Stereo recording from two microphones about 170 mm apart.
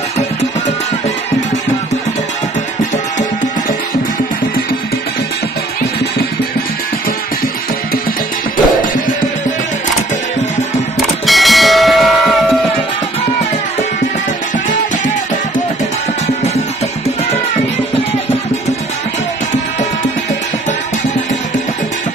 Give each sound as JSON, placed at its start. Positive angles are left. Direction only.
{"t": 11.2, "sound": "music", "side_deg": 0}